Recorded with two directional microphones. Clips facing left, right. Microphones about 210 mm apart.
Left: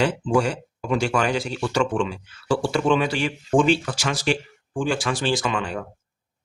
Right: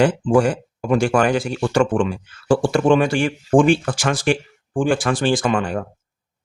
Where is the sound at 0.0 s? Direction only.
50° right (ahead or behind).